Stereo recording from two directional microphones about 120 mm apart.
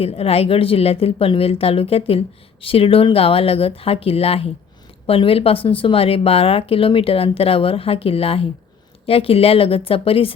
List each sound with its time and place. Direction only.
0.0 s speech: 55° left (ahead or behind)